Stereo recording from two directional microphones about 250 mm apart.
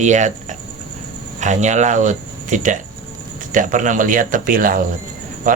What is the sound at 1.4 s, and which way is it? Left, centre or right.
Speech, right.